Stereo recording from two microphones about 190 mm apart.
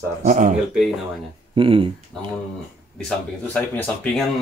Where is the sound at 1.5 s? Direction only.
25° right (ahead or behind).